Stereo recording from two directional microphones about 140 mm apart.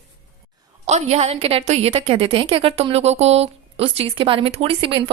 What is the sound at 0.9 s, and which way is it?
A woman's voice, 55° right (ahead or behind).